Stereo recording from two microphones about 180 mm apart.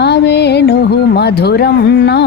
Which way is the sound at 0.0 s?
70° left (ahead or behind).